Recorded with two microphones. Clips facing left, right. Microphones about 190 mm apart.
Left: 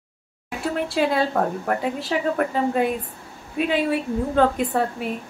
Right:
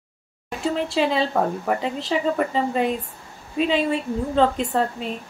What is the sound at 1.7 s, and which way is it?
A woman's voice, 5° left (ahead or behind).